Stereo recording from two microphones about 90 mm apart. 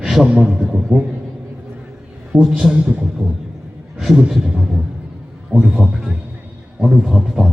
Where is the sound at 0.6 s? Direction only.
Centre (ahead or behind).